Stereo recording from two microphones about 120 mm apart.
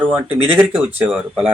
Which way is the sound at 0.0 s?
15° right (ahead or behind).